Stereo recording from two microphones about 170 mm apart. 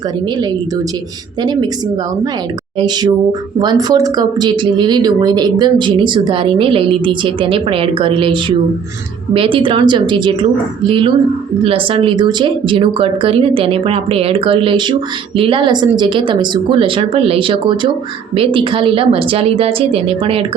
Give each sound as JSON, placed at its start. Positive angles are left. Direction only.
{"t": 2.7, "sound": "speech", "side_deg": -25}